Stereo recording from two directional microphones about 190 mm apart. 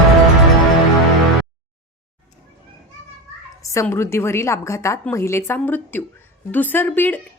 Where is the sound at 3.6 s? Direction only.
15° left (ahead or behind).